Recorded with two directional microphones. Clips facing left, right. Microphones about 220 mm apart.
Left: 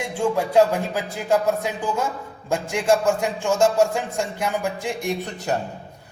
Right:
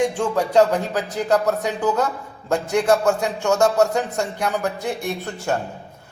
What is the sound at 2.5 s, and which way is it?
A man's voice, 10° left (ahead or behind).